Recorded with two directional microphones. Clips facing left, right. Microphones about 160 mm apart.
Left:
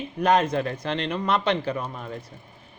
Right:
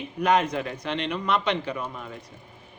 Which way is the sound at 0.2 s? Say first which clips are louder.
Left 2 dB; 30° left (ahead or behind).